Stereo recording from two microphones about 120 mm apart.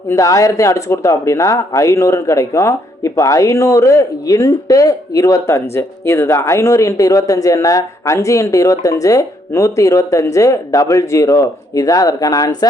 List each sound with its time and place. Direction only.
0.1 s speech: 25° left (ahead or behind)